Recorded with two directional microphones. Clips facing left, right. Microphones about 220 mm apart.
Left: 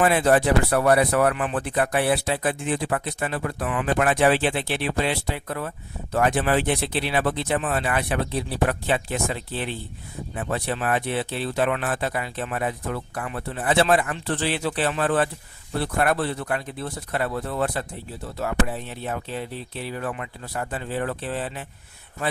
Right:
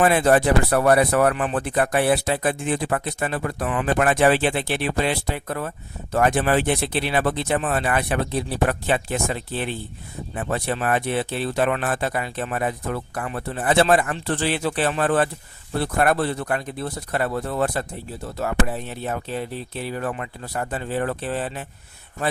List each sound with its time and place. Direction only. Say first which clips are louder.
0.0 s speech: right 2 dB; 45° right (ahead or behind)